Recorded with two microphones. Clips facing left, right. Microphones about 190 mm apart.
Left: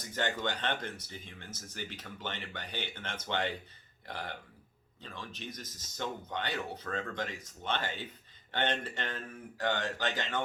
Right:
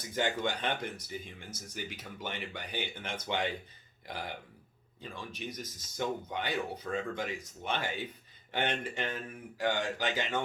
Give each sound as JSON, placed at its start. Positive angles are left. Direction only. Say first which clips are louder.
{"t": 0.2, "sound": "speech", "louder": "right 2 dB", "side_deg": -10}